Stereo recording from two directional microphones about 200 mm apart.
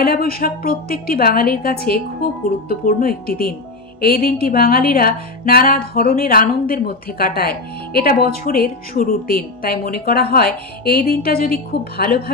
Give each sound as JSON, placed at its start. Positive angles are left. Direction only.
{"t": 0.0, "sound": "speech", "side_deg": 45}